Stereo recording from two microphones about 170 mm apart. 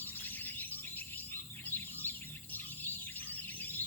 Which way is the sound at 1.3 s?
10° left (ahead or behind).